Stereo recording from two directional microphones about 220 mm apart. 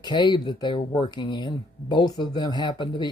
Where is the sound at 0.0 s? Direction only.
20° left (ahead or behind).